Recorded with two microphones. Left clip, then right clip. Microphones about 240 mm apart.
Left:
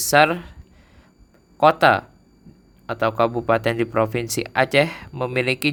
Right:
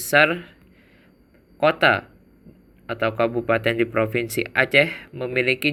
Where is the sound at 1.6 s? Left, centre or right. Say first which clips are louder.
Left 3 dB; left.